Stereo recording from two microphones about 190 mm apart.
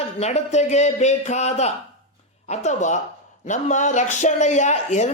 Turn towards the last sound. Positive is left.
turn(degrees=35)  # may be behind; listen again after turning